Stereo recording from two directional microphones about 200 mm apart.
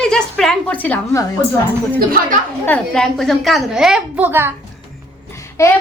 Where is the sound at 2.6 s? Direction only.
5° left (ahead or behind); by 4.5 s 10° right (ahead or behind).